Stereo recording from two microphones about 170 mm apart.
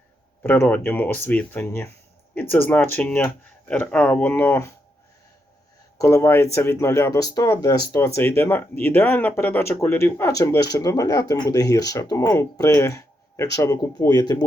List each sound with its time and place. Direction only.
0.4 s speech: 10° left (ahead or behind)
6.0 s speech: 20° left (ahead or behind)